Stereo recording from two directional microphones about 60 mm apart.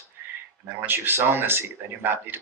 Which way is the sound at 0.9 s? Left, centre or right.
Right.